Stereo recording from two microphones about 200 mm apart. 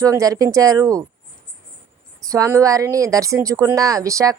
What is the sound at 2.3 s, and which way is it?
A woman's voice, 15° right (ahead or behind).